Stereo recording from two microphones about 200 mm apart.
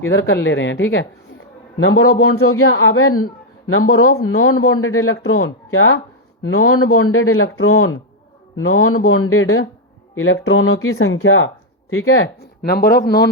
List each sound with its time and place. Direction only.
0.0 s speech: 70° left (ahead or behind)
1.8 s speech: 90° left
12.6 s speech: 50° left (ahead or behind)